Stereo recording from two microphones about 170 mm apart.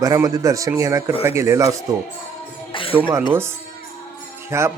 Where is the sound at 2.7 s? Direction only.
30° left (ahead or behind).